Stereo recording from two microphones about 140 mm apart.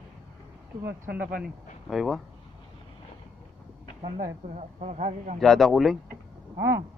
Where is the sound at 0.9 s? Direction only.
90° right.